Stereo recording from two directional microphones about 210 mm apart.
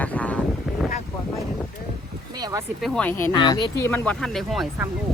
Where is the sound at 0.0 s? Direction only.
5° left (ahead or behind).